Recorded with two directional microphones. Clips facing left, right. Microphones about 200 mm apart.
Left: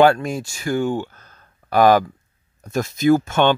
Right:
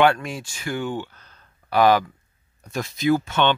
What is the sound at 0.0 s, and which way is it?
Speech, 40° left (ahead or behind).